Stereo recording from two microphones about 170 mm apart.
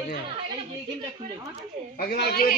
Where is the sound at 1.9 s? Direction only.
65° left (ahead or behind).